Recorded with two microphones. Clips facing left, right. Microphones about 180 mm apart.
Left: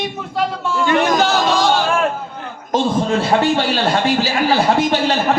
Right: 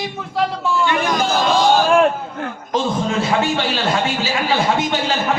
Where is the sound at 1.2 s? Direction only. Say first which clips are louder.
Left 2 dB; 70° left (ahead or behind).